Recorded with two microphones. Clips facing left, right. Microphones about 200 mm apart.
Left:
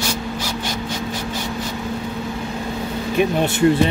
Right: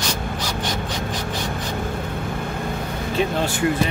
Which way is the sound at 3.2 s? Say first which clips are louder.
Left 4 dB; 25° left (ahead or behind).